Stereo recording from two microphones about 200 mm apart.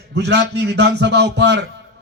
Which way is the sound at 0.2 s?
60° right (ahead or behind).